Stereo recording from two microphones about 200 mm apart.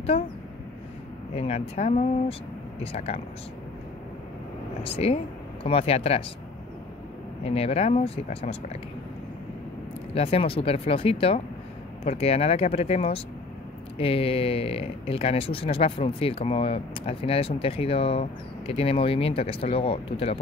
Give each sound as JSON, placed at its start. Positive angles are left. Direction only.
{"t": 1.3, "sound": "speech", "side_deg": 30}
{"t": 4.8, "sound": "speech", "side_deg": 30}
{"t": 7.4, "sound": "speech", "side_deg": 30}
{"t": 10.1, "sound": "speech", "side_deg": 30}